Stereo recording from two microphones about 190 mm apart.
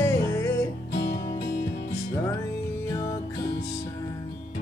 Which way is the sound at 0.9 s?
55° left (ahead or behind).